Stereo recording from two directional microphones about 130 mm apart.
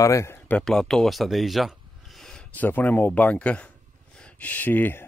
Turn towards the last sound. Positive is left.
turn(degrees=15)  # may be behind; listen again after turning